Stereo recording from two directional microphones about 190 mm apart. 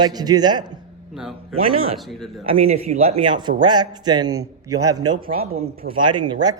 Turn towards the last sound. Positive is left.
turn(degrees=-20)  # may be behind; listen again after turning